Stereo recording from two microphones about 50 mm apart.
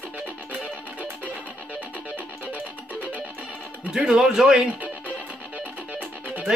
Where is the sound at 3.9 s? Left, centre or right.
Centre.